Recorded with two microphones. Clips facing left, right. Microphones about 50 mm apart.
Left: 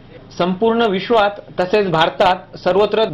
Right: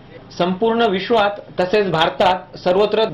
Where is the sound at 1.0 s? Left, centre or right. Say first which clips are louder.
Left 2 dB; left.